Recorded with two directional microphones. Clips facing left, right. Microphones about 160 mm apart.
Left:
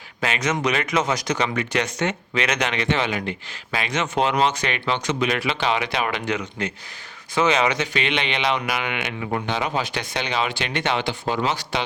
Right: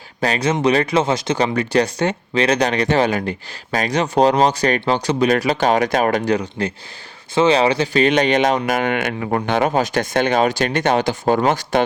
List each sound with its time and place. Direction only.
0.2 s speech: 35° right (ahead or behind)